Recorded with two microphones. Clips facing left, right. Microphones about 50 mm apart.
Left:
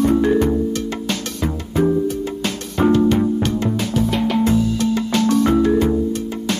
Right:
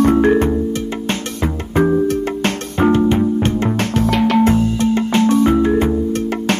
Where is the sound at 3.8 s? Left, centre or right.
Right.